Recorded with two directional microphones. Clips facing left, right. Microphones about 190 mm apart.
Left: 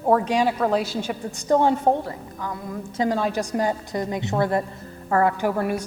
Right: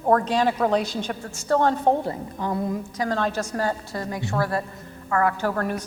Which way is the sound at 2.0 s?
25° right (ahead or behind).